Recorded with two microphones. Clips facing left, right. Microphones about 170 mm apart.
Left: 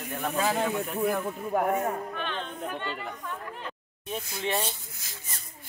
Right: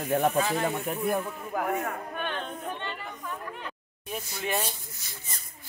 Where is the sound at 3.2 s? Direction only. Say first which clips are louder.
Even; 5° right (ahead or behind).